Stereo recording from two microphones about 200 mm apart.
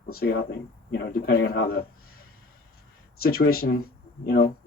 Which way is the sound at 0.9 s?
50° left (ahead or behind).